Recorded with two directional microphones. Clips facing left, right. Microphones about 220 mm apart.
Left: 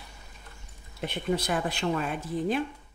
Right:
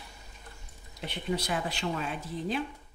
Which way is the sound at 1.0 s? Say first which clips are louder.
Left 4 dB; 50° left (ahead or behind).